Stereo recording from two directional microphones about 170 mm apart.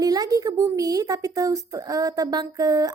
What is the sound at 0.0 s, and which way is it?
A woman's voice, 20° right (ahead or behind).